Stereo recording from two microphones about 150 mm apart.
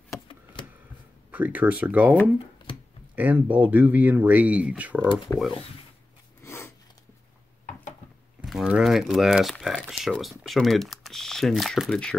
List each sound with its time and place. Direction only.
0.3 s a sound: 35° left (ahead or behind)
1.3 s speech: 10° right (ahead or behind)
3.2 s speech: 10° right (ahead or behind)
5.3 s speech: 15° left (ahead or behind)
6.4 s a sound: 15° left (ahead or behind)
8.4 s speech: 5° right (ahead or behind)